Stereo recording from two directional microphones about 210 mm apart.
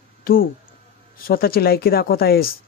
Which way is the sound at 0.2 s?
45° left (ahead or behind).